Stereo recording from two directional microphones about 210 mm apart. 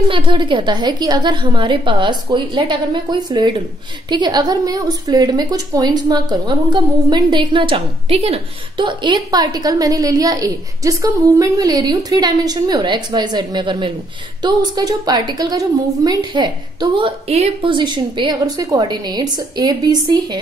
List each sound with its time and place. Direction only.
0.1 s a woman's voice: 25° right (ahead or behind)